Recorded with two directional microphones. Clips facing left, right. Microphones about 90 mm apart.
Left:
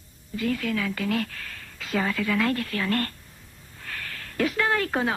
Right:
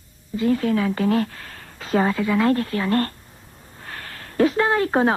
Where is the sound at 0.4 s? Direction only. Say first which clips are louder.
Right 7 dB; 30° right (ahead or behind).